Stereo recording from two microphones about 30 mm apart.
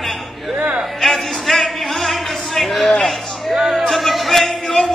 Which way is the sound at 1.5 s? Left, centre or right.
Centre.